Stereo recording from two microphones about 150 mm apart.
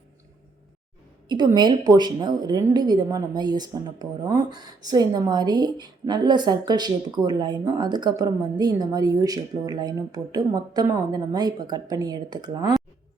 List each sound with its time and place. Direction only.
1.5 s a woman's voice: 30° right (ahead or behind)